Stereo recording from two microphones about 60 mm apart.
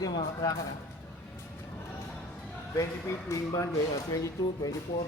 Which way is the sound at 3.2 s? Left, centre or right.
Left.